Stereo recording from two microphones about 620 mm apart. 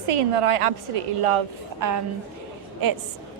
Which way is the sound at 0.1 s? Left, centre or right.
Right.